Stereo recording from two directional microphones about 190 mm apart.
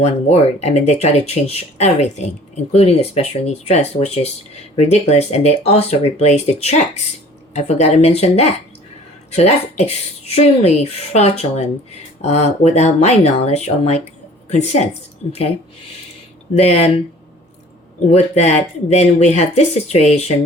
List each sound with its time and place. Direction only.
0.0 s speech: 35° left (ahead or behind)
16.6 s speech: 35° left (ahead or behind)
18.1 s speech: 35° left (ahead or behind)